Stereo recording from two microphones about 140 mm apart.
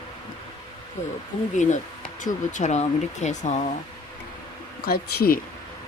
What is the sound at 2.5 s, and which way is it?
Speech, 55° left (ahead or behind).